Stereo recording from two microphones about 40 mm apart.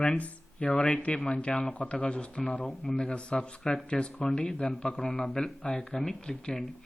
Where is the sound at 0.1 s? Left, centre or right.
Left.